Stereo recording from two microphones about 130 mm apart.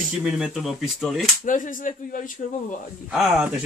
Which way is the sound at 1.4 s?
80° left.